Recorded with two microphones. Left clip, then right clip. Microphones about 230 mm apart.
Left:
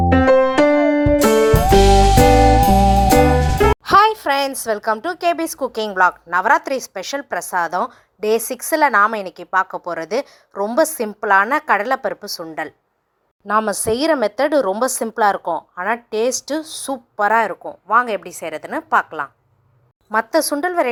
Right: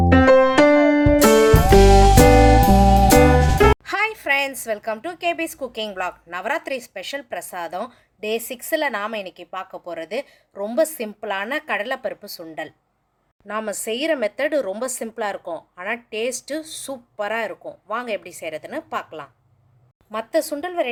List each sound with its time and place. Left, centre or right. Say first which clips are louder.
0.0 s music: even; centre
3.8 s music: left 11 dB; centre
4.2 s a sound: left 2 dB; centre
4.7 s a woman's voice: left 6 dB; centre
10.8 s a woman's voice: left 3 dB; centre
12.4 s a woman's voice: left 5 dB; centre
20.1 s a woman's voice: left 5 dB; centre